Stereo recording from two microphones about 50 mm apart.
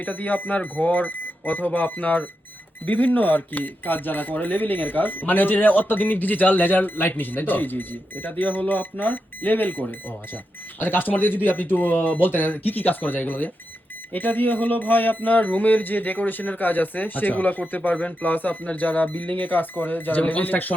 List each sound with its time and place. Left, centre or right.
0.0 s speech: left